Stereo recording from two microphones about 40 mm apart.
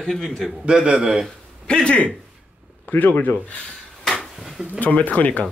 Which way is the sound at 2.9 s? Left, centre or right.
Left.